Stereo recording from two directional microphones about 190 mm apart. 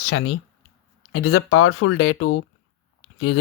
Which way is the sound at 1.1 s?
90° left.